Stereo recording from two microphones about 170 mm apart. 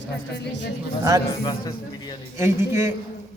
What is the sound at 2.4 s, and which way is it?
Speech, 15° right (ahead or behind).